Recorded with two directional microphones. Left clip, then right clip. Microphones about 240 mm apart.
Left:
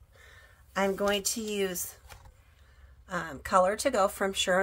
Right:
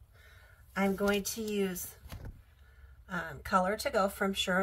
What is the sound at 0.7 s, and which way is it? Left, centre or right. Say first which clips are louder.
Speech: left 3 dB; left.